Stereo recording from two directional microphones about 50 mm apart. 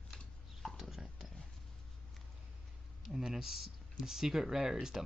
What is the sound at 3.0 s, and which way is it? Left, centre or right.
Speech, centre.